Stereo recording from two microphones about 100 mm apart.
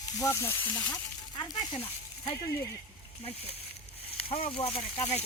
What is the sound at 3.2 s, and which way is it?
Speech, 75° left (ahead or behind).